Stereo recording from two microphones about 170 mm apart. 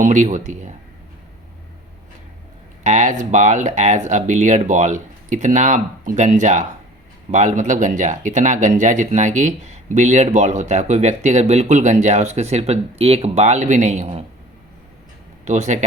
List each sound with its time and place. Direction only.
0.0 s speech: 45° right (ahead or behind)
2.8 s speech: 45° right (ahead or behind)
15.4 s speech: 45° right (ahead or behind)